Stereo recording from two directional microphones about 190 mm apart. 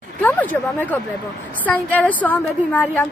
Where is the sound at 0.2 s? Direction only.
10° left (ahead or behind).